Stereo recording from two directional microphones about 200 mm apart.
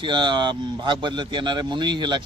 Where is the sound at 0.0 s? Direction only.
25° right (ahead or behind).